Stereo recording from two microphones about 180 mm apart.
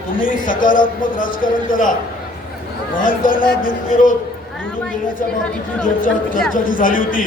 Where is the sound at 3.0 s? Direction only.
50° left (ahead or behind).